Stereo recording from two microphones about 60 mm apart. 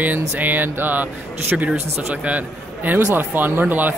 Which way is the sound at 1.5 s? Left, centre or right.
Centre.